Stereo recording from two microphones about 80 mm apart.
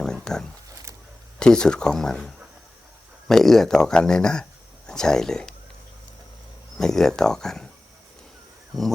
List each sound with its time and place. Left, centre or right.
0.0 s a sound: centre
1.4 s speech: centre
6.7 s speech: centre
8.7 s speech: centre